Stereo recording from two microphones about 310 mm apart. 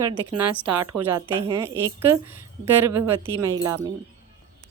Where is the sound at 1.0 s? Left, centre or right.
Centre.